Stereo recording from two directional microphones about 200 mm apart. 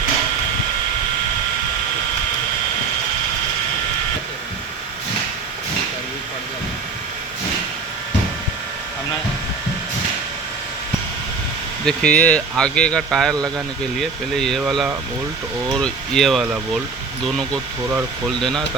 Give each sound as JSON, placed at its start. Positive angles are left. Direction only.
{"t": 11.9, "sound": "speech", "side_deg": 5}